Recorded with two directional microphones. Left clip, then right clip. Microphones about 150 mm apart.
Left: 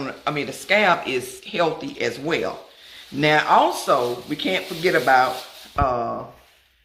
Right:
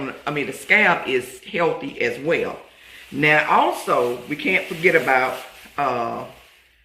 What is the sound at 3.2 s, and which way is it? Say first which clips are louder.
Speech: even; 45° left (ahead or behind).